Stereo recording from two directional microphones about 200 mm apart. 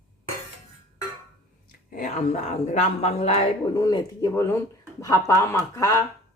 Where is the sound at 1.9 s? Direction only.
40° left (ahead or behind).